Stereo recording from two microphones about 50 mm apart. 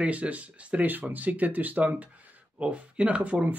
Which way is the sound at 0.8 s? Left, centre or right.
Right.